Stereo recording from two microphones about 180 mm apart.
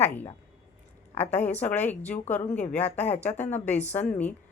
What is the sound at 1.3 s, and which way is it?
A woman's voice, 10° left (ahead or behind).